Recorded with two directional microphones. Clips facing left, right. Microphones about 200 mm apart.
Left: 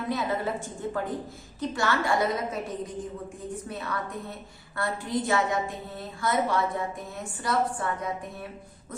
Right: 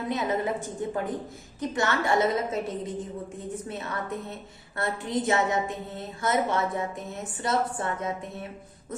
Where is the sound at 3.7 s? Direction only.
25° right (ahead or behind).